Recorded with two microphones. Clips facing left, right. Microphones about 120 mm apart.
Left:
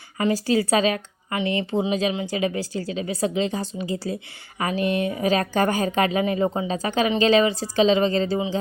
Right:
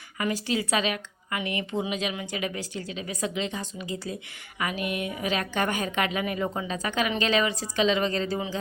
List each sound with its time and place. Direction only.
0.2 s speech: 35° left (ahead or behind)